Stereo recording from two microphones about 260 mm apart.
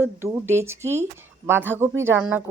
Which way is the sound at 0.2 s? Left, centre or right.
Centre.